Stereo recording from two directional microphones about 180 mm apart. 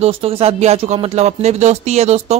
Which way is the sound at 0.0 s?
30° right (ahead or behind).